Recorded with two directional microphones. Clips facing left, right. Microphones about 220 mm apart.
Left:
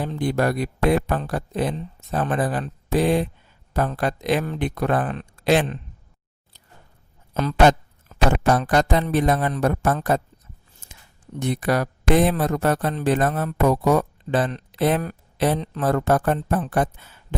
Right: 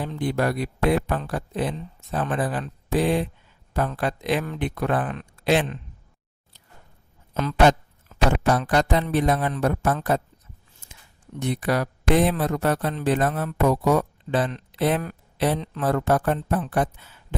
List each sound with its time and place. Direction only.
0.0 s speech: 40° left (ahead or behind)
7.3 s speech: 45° left (ahead or behind)
11.3 s speech: 45° left (ahead or behind)